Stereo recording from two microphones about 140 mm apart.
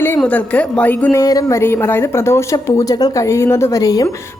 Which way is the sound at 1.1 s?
25° left (ahead or behind).